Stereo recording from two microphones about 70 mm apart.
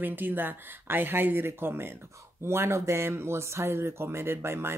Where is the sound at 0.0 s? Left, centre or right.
Right.